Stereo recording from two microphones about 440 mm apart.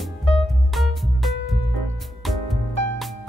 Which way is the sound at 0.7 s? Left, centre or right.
Centre.